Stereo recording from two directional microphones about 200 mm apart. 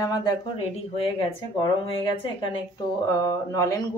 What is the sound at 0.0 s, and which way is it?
Speech, 20° left (ahead or behind).